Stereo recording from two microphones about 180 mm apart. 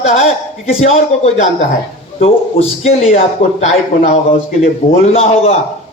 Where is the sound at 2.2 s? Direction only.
35° left (ahead or behind).